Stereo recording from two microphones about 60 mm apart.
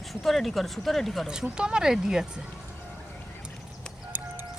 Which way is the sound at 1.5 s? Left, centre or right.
Centre.